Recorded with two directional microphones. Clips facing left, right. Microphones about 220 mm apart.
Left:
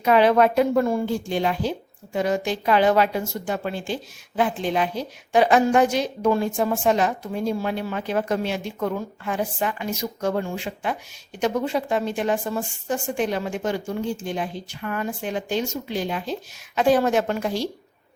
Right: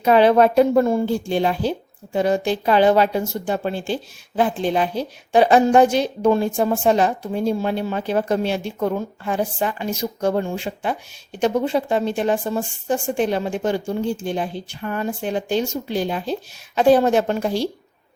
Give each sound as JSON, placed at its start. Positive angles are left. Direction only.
{"t": 0.0, "sound": "speech", "side_deg": -30}